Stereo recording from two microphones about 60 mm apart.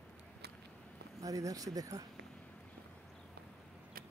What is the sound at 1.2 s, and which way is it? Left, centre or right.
Speech, right.